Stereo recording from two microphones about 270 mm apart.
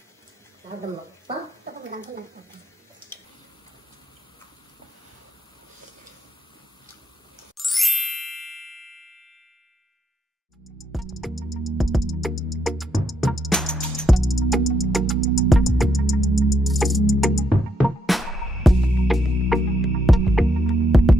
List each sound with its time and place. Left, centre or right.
1.3 s a sound: right
7.5 s ding: centre
10.8 s music: centre